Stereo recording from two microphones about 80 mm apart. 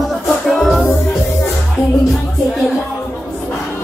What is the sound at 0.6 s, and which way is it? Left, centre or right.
Music, centre.